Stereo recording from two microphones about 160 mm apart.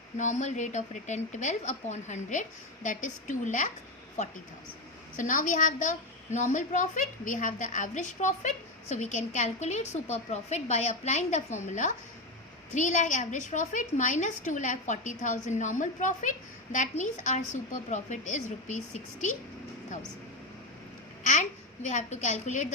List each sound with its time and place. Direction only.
0.2 s a woman's voice: 50° left (ahead or behind)
21.8 s a woman's voice: 45° left (ahead or behind)